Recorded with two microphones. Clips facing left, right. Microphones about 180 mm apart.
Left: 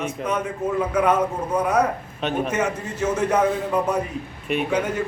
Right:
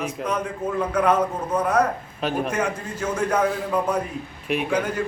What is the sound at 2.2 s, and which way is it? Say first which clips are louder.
A man's voice: left 1 dB; centre (ahead or behind).